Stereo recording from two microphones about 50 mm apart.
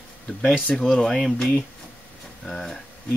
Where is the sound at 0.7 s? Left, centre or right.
Centre.